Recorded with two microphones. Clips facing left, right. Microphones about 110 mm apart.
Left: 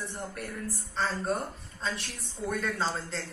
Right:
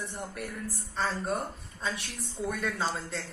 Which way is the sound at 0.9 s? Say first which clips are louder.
Left 1 dB; centre (ahead or behind).